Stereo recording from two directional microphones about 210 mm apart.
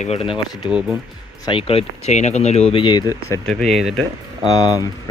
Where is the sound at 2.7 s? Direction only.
20° left (ahead or behind).